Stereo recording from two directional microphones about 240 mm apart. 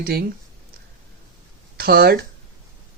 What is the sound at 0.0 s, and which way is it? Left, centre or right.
Speech, right.